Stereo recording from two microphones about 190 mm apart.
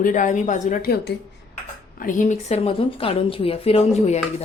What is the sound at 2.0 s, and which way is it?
Speech, 45° left (ahead or behind).